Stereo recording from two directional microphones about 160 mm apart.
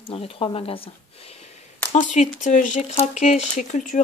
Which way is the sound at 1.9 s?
50° left (ahead or behind).